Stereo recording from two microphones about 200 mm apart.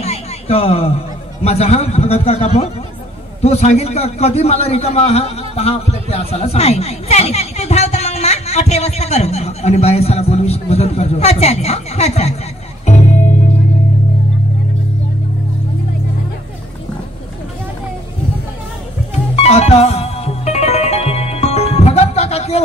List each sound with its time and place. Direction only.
0.0 s a man's voice: 30° left (ahead or behind)
12.8 s music: 35° left (ahead or behind)
19.3 s music: 30° left (ahead or behind)